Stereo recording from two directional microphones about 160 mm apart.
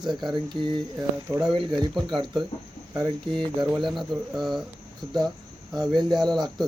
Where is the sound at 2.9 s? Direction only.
20° right (ahead or behind).